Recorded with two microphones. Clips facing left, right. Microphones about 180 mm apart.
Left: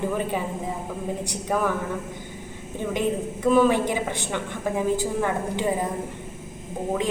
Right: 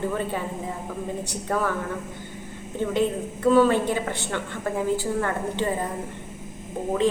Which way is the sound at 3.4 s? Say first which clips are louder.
Right 1 dB; 15° left (ahead or behind).